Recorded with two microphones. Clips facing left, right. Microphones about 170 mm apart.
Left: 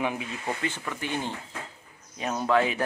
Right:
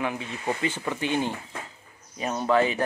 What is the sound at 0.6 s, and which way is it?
Speech, 20° right (ahead or behind).